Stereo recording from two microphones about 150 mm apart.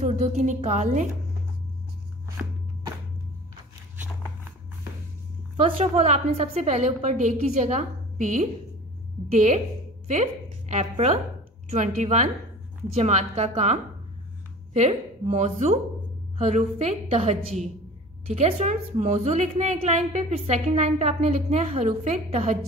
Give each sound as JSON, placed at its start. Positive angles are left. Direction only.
{"t": 0.0, "sound": "a woman's voice", "side_deg": -50}
{"t": 5.6, "sound": "a woman's voice", "side_deg": -45}
{"t": 10.7, "sound": "a woman's voice", "side_deg": -50}